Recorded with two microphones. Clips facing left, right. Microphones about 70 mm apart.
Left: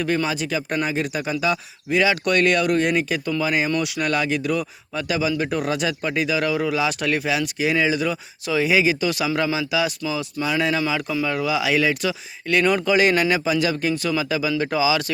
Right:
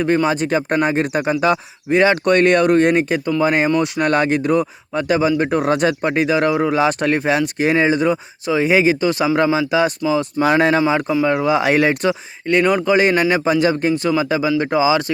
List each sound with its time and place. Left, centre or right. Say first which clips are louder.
0.0 s speech: right 6 dB; right
10.4 s speech: right 7 dB; right
12.6 s speech: right 2 dB; right